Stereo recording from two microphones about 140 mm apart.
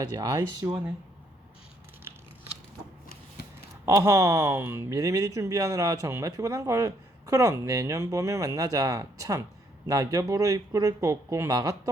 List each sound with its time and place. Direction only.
0.0 s speech: 30° right (ahead or behind)
3.8 s speech: 20° right (ahead or behind)